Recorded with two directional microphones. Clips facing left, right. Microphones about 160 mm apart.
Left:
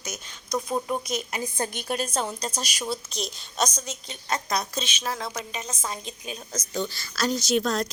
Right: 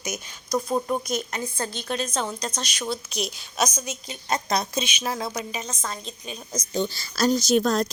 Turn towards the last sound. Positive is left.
turn(degrees=-40)  # may be behind; listen again after turning